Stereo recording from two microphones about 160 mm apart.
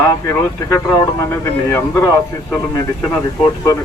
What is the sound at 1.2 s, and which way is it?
Speech, 15° left (ahead or behind).